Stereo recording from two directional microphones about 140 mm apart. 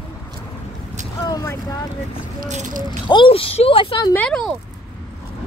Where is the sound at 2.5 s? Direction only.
60° right (ahead or behind).